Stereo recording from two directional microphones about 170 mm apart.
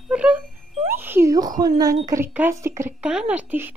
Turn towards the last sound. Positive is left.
turn(degrees=-10)  # may be behind; listen again after turning